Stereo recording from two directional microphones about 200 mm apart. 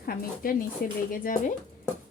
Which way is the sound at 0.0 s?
45° left (ahead or behind).